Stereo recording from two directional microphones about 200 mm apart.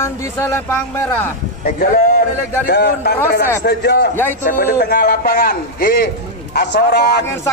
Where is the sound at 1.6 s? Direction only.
50° left (ahead or behind).